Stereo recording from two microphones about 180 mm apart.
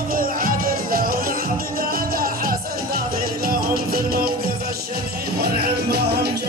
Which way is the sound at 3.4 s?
55° right (ahead or behind).